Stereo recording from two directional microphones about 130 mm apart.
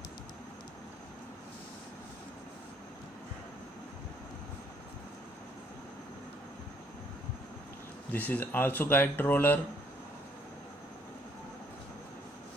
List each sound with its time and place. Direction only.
8.1 s speech: 15° left (ahead or behind)